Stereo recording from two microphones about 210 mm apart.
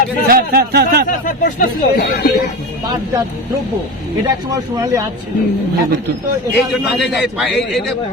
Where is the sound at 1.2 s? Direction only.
40° left (ahead or behind).